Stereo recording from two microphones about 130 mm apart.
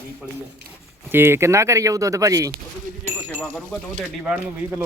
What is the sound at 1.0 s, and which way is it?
Speech, 15° right (ahead or behind).